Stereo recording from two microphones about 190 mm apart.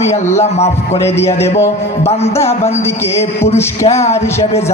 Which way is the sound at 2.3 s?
15° left (ahead or behind).